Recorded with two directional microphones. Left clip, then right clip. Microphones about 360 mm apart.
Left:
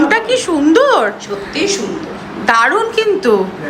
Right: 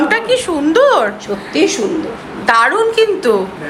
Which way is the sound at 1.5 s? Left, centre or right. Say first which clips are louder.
Right 3 dB; centre.